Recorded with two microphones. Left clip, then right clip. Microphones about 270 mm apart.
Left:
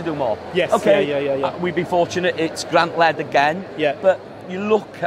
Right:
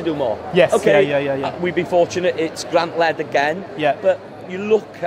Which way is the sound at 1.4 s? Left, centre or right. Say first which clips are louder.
Even; left.